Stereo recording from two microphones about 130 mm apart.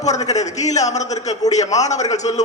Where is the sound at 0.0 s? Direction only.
60° left (ahead or behind).